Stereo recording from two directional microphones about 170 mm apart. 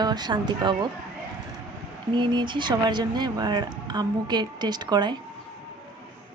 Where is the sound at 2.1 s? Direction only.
25° right (ahead or behind).